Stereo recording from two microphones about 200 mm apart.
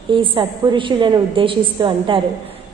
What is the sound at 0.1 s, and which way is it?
A woman's voice, 25° right (ahead or behind).